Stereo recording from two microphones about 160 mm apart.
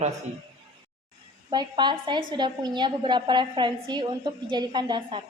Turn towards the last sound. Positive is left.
turn(degrees=-30)  # may be behind; listen again after turning